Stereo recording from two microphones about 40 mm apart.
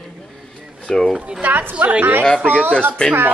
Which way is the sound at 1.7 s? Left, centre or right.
Right.